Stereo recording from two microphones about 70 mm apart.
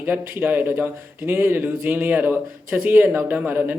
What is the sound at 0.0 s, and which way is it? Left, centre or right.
A man's voice, right.